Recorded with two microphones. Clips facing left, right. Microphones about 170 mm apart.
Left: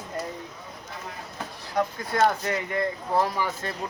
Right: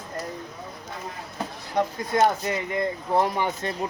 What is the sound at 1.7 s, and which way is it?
Speech, 15° right (ahead or behind).